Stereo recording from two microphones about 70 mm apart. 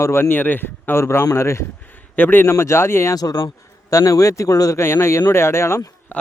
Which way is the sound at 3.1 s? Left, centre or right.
Left.